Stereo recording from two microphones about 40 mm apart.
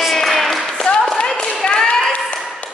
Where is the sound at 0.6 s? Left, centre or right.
Centre.